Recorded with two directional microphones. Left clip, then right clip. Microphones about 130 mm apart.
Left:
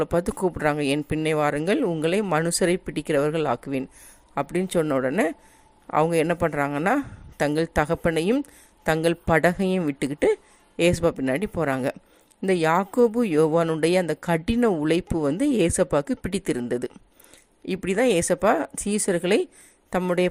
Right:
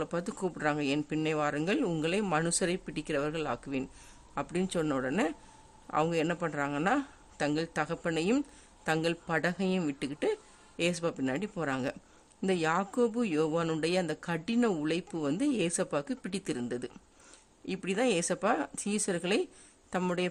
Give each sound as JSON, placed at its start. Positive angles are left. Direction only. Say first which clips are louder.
{"t": 0.0, "sound": "a woman's voice", "louder": "left 11 dB", "side_deg": 35}